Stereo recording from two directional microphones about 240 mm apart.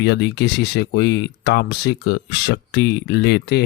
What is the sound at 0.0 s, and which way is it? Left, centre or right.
Speech, left.